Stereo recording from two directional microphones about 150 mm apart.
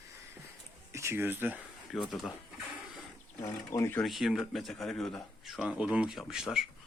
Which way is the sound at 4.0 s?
Centre (ahead or behind).